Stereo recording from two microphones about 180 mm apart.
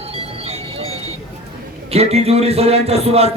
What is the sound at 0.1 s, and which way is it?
Music, 35° right (ahead or behind).